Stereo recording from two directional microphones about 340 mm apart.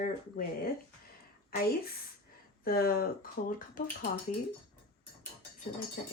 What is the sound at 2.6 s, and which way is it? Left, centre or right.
Speech, left.